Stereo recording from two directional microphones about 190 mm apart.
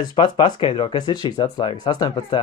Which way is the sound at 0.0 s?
25° left (ahead or behind).